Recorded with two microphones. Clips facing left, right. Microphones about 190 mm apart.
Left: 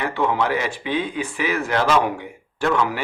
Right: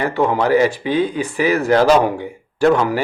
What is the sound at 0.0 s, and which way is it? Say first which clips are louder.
Speech: right 4 dB; 40° right (ahead or behind).